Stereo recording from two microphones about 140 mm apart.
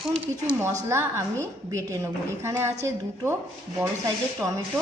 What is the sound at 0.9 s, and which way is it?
Speech, 20° right (ahead or behind).